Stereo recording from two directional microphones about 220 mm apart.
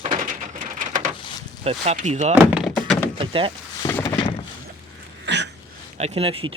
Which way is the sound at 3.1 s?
25° right (ahead or behind).